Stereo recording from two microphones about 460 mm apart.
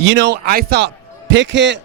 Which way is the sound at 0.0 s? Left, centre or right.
Right.